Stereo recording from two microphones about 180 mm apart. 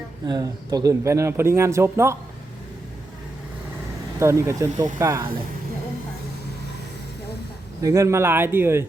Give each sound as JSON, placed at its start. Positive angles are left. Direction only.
{"t": 0.3, "sound": "a man's voice", "side_deg": -20}
{"t": 4.2, "sound": "a man's voice", "side_deg": -15}
{"t": 7.8, "sound": "a man's voice", "side_deg": -15}